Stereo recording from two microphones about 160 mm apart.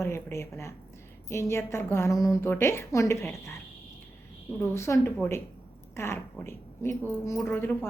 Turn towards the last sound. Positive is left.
turn(degrees=15)  # may be behind; listen again after turning